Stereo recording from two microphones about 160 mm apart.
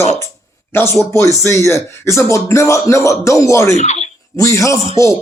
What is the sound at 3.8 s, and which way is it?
Speech, 45° left (ahead or behind).